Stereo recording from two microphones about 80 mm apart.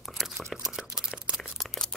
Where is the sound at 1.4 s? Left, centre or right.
Centre.